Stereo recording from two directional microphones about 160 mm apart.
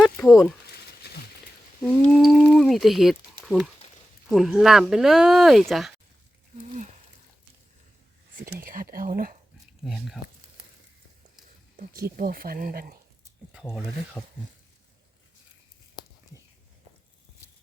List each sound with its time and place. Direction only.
0.3 s speech: centre (ahead or behind)
0.7 s a sound: 85° left
1.8 s speech: 5° left (ahead or behind)
8.4 s speech: 65° right (ahead or behind)
9.8 s speech: centre (ahead or behind)
11.8 s speech: 60° right (ahead or behind)
13.5 s speech: 5° right (ahead or behind)
16.0 s a sound: 25° left (ahead or behind)